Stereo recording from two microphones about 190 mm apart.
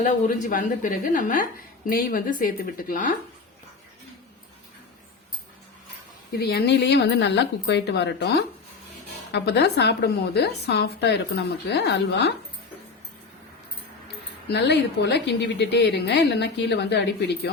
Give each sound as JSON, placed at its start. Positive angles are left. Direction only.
{"t": 0.0, "sound": "a woman's voice", "side_deg": 40}
{"t": 6.3, "sound": "a woman's voice", "side_deg": 55}
{"t": 14.4, "sound": "a woman's voice", "side_deg": 60}